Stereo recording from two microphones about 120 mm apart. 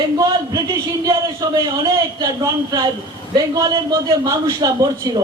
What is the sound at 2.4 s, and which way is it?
A man's voice, 35° right (ahead or behind).